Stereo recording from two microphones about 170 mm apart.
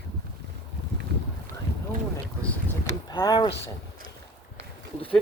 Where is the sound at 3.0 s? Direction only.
25° left (ahead or behind).